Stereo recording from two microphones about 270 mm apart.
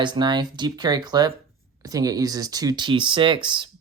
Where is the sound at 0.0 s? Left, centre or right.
Centre.